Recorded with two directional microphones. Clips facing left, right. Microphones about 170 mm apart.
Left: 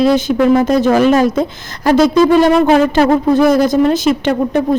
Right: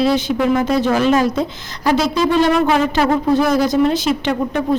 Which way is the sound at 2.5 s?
45° left (ahead or behind).